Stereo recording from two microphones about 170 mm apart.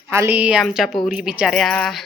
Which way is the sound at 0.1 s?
15° right (ahead or behind).